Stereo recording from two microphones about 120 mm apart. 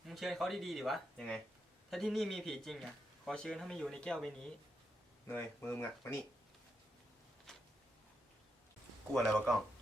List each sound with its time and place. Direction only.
0.0 s speech: centre (ahead or behind)
5.2 s speech: 20° left (ahead or behind)
7.5 s a sound: 5° left (ahead or behind)
9.1 s speech: centre (ahead or behind)